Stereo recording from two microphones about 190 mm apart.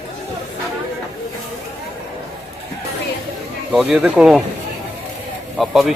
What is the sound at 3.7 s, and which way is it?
Speech, centre (ahead or behind).